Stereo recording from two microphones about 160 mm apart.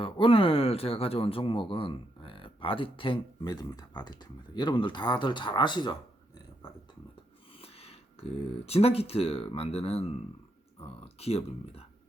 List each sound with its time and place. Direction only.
0.0 s speech: 35° left (ahead or behind)
7.6 s speech: 40° left (ahead or behind)